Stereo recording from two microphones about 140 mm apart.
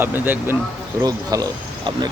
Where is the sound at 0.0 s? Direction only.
15° right (ahead or behind).